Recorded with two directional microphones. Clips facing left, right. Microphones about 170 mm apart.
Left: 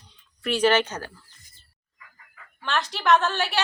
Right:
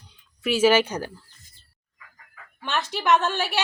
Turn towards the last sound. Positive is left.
turn(degrees=-5)  # may be behind; listen again after turning